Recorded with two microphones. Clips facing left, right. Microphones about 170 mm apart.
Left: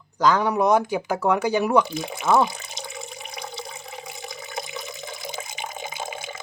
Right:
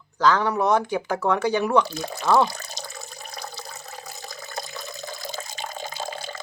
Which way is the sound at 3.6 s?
15° left (ahead or behind).